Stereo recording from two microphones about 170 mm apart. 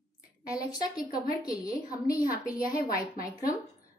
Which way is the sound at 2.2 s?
55° left (ahead or behind).